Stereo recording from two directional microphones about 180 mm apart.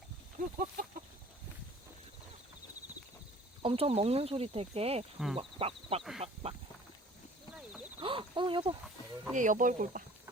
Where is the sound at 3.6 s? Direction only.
30° right (ahead or behind).